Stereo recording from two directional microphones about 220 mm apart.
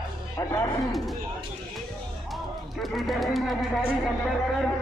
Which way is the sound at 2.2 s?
Centre (ahead or behind).